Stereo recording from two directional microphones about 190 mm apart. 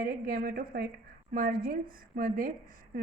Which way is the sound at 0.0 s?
50° right (ahead or behind).